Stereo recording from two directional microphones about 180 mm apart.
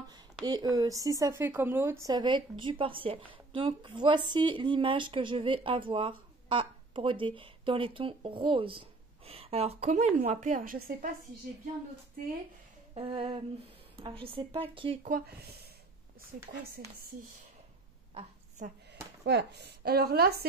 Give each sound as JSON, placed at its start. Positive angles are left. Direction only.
{"t": 0.1, "sound": "speech", "side_deg": -20}
{"t": 12.9, "sound": "speech", "side_deg": -30}
{"t": 15.0, "sound": "speech", "side_deg": -55}
{"t": 19.2, "sound": "speech", "side_deg": -70}